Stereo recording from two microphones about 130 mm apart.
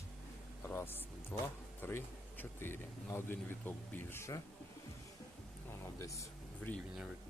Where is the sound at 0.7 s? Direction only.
15° left (ahead or behind).